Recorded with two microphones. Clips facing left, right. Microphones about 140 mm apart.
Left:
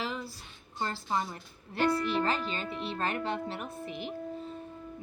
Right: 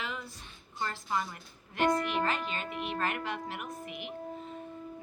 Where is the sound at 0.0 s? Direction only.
35° left (ahead or behind).